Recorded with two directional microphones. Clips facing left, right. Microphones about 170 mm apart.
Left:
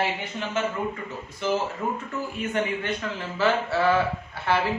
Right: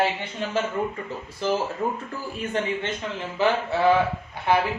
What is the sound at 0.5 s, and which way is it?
Speech, 35° right (ahead or behind).